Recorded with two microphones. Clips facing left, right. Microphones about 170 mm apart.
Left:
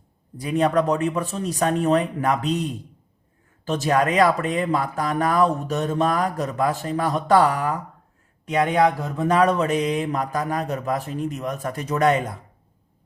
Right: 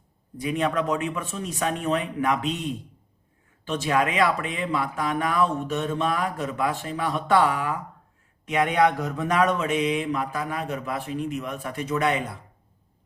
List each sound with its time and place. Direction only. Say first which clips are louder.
0.3 s speech: left 5 dB; 35° left (ahead or behind)
3.7 s speech: left 3 dB; 40° left (ahead or behind)